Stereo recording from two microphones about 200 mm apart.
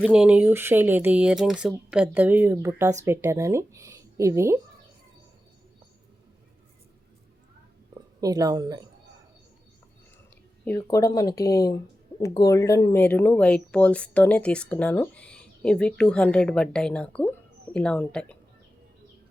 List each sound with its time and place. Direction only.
0.0 s speech: 5° right (ahead or behind)
8.2 s speech: 20° right (ahead or behind)
10.8 s speech: 20° left (ahead or behind)